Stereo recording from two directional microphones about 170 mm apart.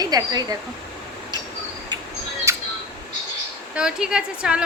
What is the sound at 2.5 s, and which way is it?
Camera, 15° right (ahead or behind).